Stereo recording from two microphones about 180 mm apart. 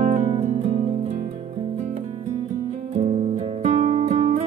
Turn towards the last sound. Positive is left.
turn(degrees=-40)  # may be behind; listen again after turning